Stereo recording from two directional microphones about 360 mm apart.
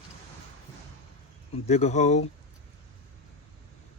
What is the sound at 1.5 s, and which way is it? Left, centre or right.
Speech, centre.